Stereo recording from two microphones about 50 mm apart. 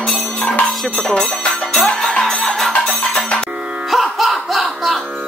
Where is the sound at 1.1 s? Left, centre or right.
Left.